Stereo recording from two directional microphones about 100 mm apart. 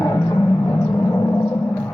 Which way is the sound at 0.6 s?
25° left (ahead or behind).